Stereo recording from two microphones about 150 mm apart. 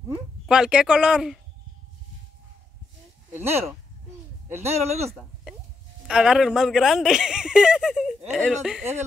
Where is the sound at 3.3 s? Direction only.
45° right (ahead or behind).